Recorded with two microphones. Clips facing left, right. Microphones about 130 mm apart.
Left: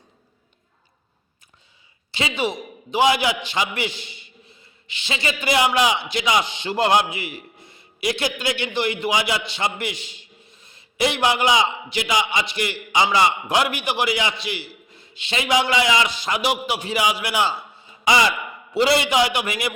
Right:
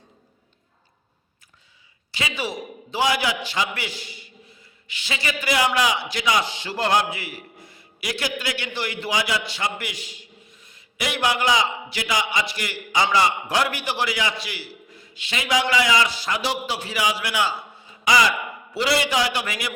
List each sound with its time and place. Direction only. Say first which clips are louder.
2.1 s a man's voice: left 4 dB; 25° left (ahead or behind)